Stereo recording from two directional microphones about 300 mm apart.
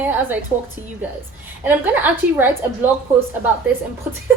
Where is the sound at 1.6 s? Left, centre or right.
Centre.